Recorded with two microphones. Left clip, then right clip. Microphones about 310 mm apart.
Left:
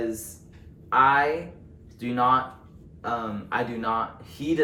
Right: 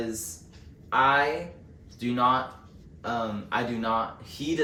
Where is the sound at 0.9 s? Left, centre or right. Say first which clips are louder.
Left 3 dB; centre.